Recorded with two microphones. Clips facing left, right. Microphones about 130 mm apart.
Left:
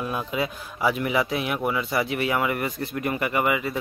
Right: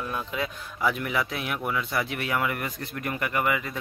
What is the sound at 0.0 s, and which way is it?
A man's voice, 10° left (ahead or behind).